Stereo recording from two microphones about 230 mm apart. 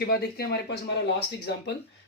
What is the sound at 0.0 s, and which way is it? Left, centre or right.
Speech, left.